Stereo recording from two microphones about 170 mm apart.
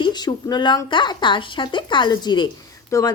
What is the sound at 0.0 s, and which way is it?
Speech, 25° left (ahead or behind).